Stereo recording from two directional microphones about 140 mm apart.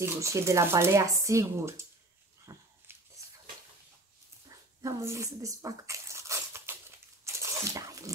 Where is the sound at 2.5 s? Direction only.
20° right (ahead or behind).